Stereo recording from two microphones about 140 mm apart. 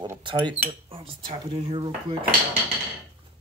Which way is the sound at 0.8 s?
40° right (ahead or behind).